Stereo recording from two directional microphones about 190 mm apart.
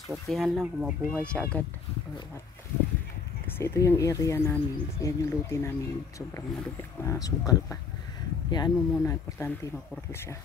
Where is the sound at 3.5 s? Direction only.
15° left (ahead or behind).